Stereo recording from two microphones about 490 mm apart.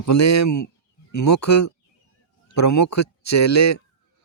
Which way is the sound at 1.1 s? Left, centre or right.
Left.